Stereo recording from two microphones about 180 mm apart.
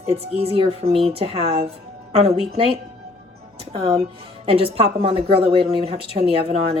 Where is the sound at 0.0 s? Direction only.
35° right (ahead or behind).